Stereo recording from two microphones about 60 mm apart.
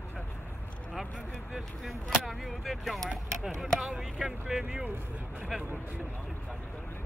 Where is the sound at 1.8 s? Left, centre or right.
Centre.